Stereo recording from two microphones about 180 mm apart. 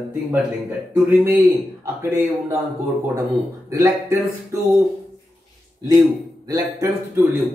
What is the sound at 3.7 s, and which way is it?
Speech, 15° right (ahead or behind).